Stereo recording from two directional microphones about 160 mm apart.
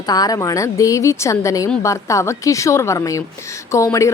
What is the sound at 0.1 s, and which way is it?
A woman's voice, 25° left (ahead or behind).